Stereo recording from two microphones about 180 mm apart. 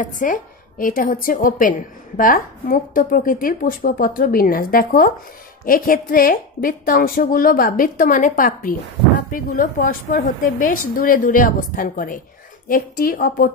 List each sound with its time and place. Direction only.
0.0 s a woman's voice: 45° left (ahead or behind)